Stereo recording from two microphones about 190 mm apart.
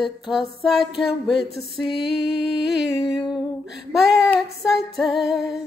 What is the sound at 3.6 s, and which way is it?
Music, centre (ahead or behind).